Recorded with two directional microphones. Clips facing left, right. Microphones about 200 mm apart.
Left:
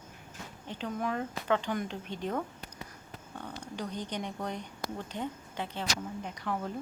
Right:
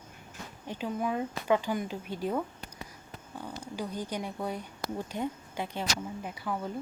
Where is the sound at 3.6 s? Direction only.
10° right (ahead or behind).